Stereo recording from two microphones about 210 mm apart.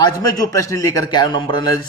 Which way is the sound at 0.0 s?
20° left (ahead or behind).